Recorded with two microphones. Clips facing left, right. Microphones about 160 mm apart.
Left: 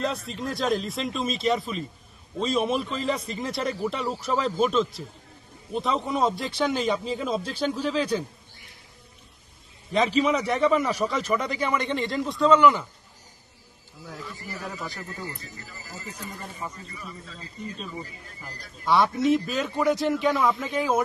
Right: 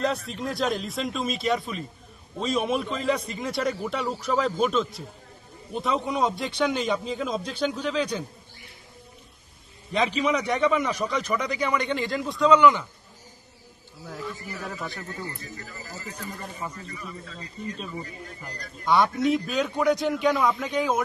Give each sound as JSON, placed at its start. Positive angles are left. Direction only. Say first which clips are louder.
{"t": 0.0, "sound": "a man's voice", "louder": "right 2 dB", "side_deg": 0}
{"t": 9.9, "sound": "a man's voice", "louder": "left 2 dB", "side_deg": 0}
{"t": 14.5, "sound": "a man's voice", "louder": "right 1 dB", "side_deg": 0}
{"t": 18.4, "sound": "a man's voice", "louder": "even", "side_deg": 5}